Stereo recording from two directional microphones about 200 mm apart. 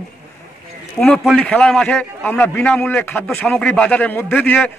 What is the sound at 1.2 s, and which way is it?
A man's voice, 5° left (ahead or behind).